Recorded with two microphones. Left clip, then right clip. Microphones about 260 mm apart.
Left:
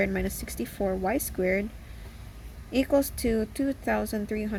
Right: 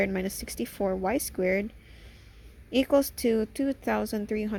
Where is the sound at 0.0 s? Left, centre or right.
Right.